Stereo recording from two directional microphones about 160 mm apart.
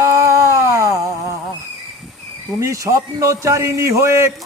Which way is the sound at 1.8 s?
Centre (ahead or behind).